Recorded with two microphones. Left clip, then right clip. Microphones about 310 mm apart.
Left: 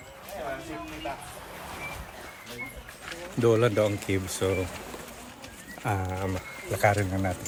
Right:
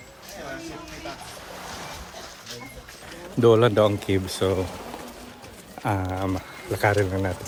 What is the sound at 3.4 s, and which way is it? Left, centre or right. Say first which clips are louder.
Speech: right 6 dB; centre.